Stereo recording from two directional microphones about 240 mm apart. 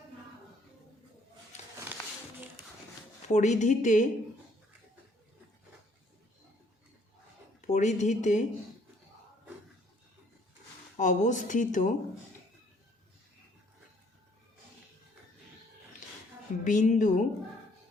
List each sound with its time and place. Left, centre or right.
3.3 s speech: left
7.7 s speech: left
10.9 s speech: left
16.6 s speech: left